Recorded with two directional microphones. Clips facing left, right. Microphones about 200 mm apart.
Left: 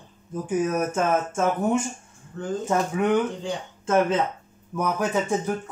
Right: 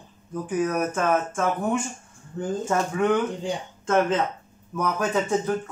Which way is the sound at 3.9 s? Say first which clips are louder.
Left 1 dB; 5° left (ahead or behind).